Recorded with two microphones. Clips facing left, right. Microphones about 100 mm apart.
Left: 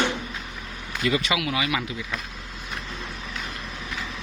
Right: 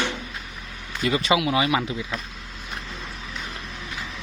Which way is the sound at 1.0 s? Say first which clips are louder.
Right 3 dB; 30° right (ahead or behind).